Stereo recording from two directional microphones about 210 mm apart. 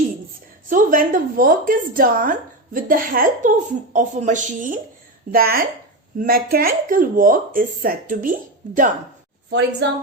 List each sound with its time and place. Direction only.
0.7 s speech: 40° right (ahead or behind)
9.8 s speech: 55° right (ahead or behind)